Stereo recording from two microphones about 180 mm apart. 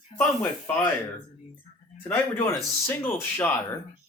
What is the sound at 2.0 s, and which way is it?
Speech, 10° left (ahead or behind).